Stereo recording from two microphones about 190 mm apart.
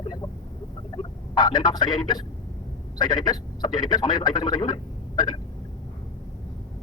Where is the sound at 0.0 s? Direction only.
20° left (ahead or behind).